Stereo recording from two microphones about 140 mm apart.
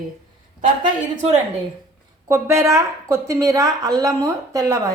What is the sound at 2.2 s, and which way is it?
A woman's voice, 20° right (ahead or behind).